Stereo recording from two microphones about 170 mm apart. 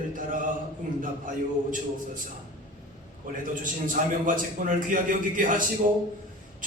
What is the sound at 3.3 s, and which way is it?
Speech, 50° right (ahead or behind).